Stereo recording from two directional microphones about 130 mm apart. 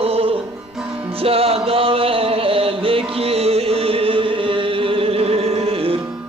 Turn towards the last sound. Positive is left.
turn(degrees=-50)  # may be behind; listen again after turning